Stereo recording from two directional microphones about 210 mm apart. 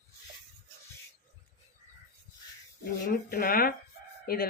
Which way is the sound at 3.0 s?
45° left (ahead or behind).